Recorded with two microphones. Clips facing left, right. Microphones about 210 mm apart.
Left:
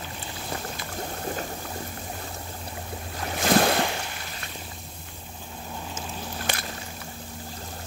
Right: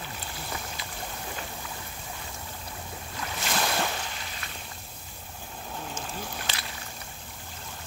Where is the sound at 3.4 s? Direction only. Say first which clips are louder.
Left 10 dB; 55° left (ahead or behind).